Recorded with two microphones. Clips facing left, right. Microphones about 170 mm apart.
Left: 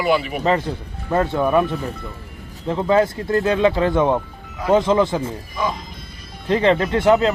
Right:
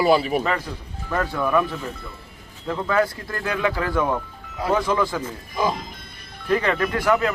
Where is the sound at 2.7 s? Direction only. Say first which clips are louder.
Left 5 dB; 25° left (ahead or behind).